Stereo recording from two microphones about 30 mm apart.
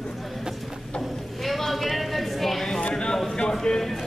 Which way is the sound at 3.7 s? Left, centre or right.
Left.